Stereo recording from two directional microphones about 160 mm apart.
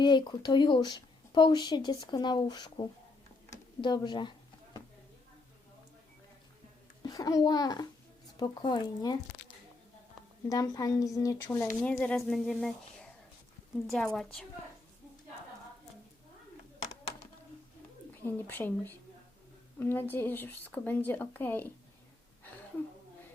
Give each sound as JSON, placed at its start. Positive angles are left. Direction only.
{"t": 0.0, "sound": "a woman's voice", "side_deg": 30}
{"t": 7.0, "sound": "a child's voice", "side_deg": 25}
{"t": 10.5, "sound": "a woman's voice", "side_deg": 20}
{"t": 18.2, "sound": "speech", "side_deg": 15}